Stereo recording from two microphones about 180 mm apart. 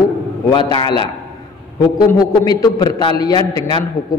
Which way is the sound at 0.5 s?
25° left (ahead or behind).